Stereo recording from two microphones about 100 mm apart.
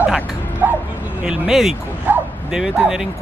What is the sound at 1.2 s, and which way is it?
Speech, 5° right (ahead or behind).